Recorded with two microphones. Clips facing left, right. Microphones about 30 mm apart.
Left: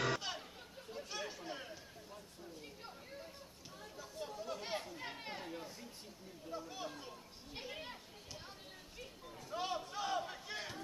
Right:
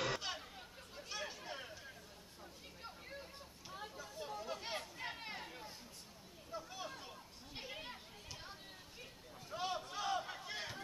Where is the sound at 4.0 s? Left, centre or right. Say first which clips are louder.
Left 3 dB; centre.